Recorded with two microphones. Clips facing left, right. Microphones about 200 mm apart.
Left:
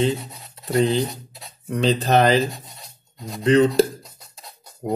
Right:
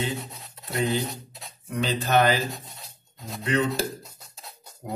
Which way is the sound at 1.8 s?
35° left (ahead or behind).